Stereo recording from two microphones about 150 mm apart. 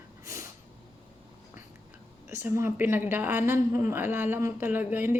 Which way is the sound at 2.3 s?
15° right (ahead or behind).